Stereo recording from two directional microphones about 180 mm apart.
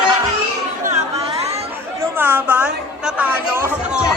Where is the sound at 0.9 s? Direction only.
35° right (ahead or behind).